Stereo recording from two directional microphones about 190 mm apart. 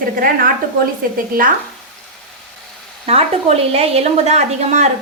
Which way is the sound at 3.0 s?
30° right (ahead or behind).